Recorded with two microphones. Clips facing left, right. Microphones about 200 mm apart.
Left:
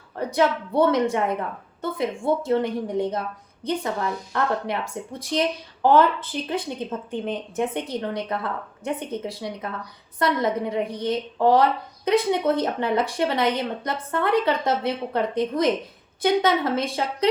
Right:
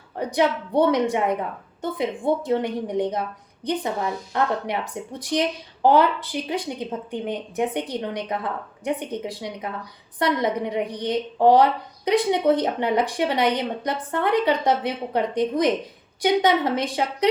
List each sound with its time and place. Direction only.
0.2 s speech: 15° right (ahead or behind)